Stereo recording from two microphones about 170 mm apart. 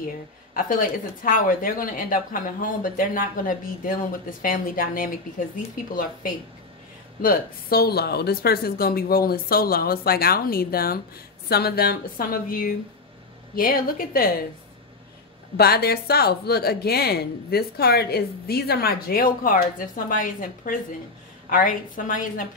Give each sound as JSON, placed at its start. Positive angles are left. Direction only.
{"t": 0.6, "sound": "speech", "side_deg": 55}
{"t": 7.2, "sound": "speech", "side_deg": 60}
{"t": 15.5, "sound": "speech", "side_deg": 65}